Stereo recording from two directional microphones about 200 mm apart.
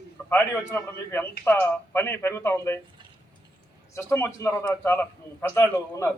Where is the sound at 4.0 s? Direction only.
10° left (ahead or behind).